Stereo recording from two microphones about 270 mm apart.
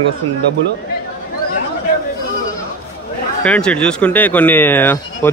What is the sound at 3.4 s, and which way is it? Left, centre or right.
Speech, centre.